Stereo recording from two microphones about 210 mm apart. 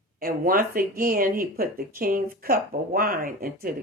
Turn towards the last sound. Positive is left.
turn(degrees=-45)  # may be behind; listen again after turning